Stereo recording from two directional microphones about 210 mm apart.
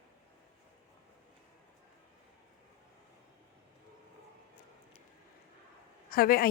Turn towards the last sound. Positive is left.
turn(degrees=45)  # may be behind; listen again after turning